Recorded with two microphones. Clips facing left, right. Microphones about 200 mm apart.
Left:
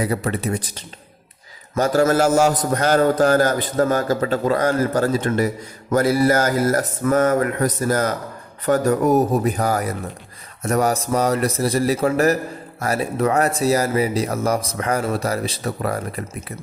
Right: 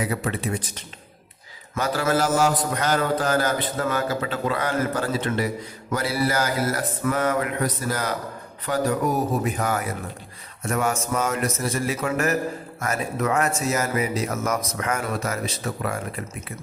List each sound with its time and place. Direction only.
0.0 s a man's voice: 40° left (ahead or behind)